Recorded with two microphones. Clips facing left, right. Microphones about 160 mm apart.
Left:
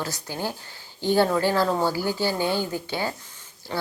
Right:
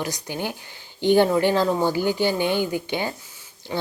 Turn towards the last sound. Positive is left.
turn(degrees=-10)  # may be behind; listen again after turning